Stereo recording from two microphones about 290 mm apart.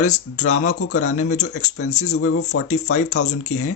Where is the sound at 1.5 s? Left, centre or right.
Left.